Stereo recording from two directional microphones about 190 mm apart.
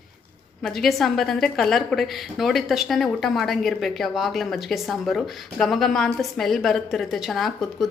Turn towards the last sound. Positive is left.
turn(degrees=0)  # may be behind; listen again after turning